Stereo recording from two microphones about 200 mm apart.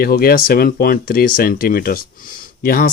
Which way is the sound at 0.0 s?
45° left (ahead or behind).